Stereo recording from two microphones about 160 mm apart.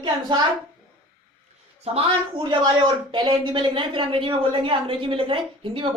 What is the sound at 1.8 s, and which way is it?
A woman's voice, 35° right (ahead or behind).